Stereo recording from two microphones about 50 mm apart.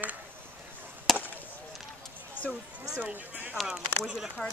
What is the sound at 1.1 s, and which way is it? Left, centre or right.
Chop, centre.